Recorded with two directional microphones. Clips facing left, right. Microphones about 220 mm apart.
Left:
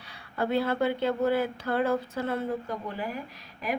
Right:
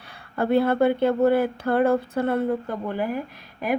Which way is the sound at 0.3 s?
55° right (ahead or behind).